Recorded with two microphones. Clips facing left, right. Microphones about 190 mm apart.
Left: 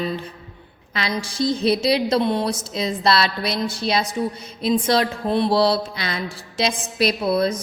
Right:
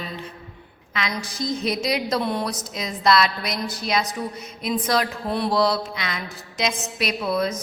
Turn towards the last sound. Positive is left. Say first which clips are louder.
# left 4 dB
turn(degrees=35)  # may be behind; listen again after turning